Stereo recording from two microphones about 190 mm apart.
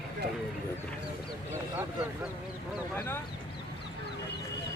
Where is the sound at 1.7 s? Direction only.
10° right (ahead or behind).